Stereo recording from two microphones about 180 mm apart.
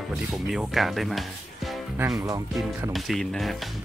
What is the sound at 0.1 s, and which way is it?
Speech, centre (ahead or behind).